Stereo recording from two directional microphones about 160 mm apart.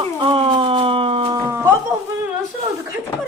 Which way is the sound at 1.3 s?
15° right (ahead or behind).